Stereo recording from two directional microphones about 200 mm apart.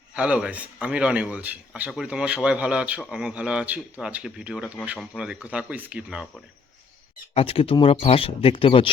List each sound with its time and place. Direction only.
0.1 s a man's voice: 5° right (ahead or behind)
7.3 s speech: 30° left (ahead or behind)